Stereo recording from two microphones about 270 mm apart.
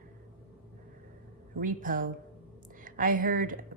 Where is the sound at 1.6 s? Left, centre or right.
Right.